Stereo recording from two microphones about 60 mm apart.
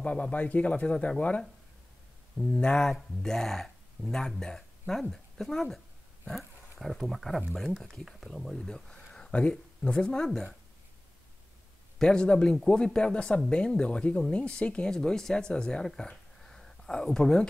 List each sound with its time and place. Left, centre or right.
0.0 s speech: left
2.3 s speech: centre
10.2 s speech: centre
12.0 s speech: centre